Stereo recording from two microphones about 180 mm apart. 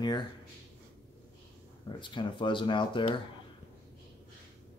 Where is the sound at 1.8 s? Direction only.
25° left (ahead or behind).